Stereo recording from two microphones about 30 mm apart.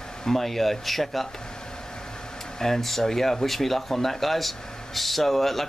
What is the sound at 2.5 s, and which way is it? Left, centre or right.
Speech, centre.